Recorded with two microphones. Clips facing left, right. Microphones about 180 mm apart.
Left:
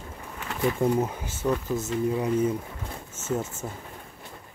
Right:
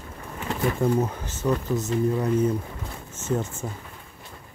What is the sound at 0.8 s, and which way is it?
Speech, 10° left (ahead or behind).